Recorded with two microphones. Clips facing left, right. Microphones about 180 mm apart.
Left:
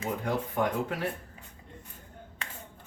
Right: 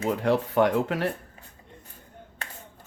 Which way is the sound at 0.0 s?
80° right.